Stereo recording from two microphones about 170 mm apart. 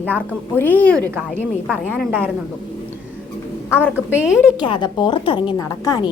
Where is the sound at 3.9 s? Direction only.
5° right (ahead or behind).